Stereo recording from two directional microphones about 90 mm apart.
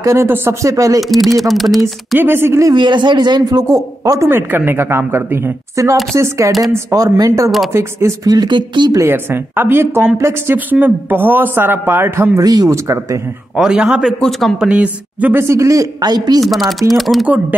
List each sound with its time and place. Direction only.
0.0 s speech: 30° right (ahead or behind)
1.0 s speech: centre (ahead or behind)
2.1 s a woman's voice: 25° right (ahead or behind)
2.8 s speech: 60° right (ahead or behind); by 4.3 s 40° right (ahead or behind)
4.3 s a woman's voice: 25° right (ahead or behind)
8.3 s speech: 55° right (ahead or behind)
8.9 s a woman's voice: 25° right (ahead or behind)
12.4 s speech: 40° right (ahead or behind)
13.6 s speech: 10° right (ahead or behind)
14.7 s speech: 15° right (ahead or behind)
15.4 s speech: 35° right (ahead or behind)
16.3 s speech: centre (ahead or behind)